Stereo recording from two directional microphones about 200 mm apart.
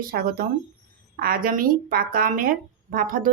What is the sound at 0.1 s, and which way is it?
A woman's voice, 45° right (ahead or behind).